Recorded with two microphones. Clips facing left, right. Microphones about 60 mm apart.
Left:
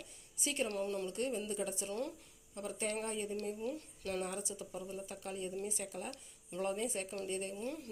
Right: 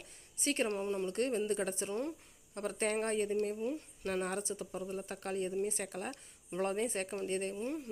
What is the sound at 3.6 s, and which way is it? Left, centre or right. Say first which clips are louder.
Speech: right 3 dB; right.